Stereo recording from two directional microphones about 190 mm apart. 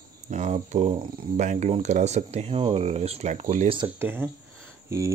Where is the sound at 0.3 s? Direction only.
40° right (ahead or behind).